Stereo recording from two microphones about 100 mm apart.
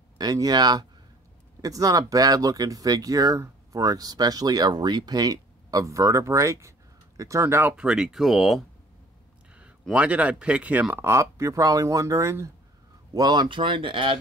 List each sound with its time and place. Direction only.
0.2 s speech: 40° right (ahead or behind); by 7.7 s 25° right (ahead or behind)
7.7 s speech: 10° right (ahead or behind)
9.9 s speech: 15° right (ahead or behind)
11.1 s speech: 30° right (ahead or behind)
13.1 s speech: 45° right (ahead or behind)